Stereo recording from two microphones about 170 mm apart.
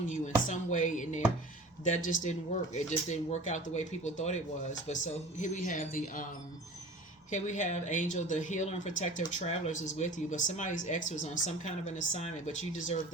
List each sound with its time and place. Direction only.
0.1 s speech: 45° left (ahead or behind)
7.3 s speech: 45° left (ahead or behind)